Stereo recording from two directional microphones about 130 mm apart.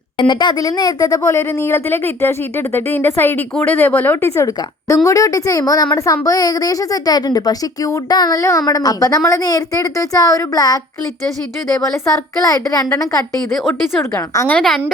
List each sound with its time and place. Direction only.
0.2 s a woman's voice: 35° left (ahead or behind)
12.4 s a woman's voice: 25° left (ahead or behind)
14.3 s speech: 15° left (ahead or behind)
14.6 s speech: 5° left (ahead or behind)